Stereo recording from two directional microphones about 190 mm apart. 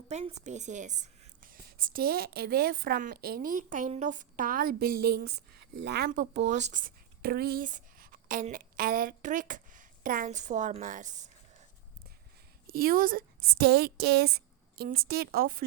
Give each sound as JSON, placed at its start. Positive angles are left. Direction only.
{"t": 0.1, "sound": "speech", "side_deg": -35}
{"t": 12.6, "sound": "a woman's voice", "side_deg": -50}